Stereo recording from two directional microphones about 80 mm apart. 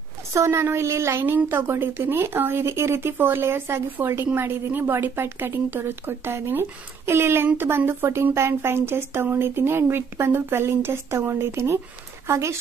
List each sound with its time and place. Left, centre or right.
0.3 s a woman's voice: right